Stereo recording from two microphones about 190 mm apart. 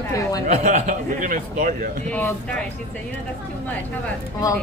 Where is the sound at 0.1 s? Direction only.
15° left (ahead or behind).